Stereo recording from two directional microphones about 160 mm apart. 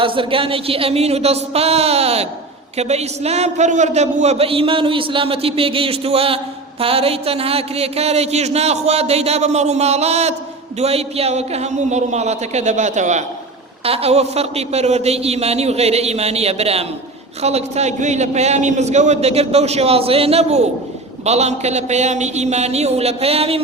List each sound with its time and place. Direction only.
0.0 s a man's voice: 35° right (ahead or behind)